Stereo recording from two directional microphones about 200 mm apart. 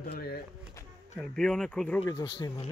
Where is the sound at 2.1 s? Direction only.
15° left (ahead or behind).